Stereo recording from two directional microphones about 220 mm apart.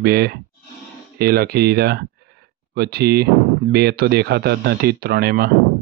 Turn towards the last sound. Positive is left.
turn(degrees=-45)  # may be behind; listen again after turning